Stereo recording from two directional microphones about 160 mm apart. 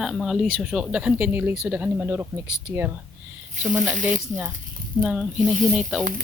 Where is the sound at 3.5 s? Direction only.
50° right (ahead or behind).